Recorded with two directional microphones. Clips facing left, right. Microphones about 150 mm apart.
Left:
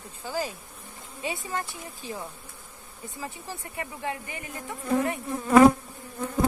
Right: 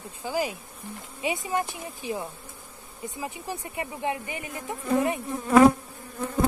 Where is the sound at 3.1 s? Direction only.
15° right (ahead or behind).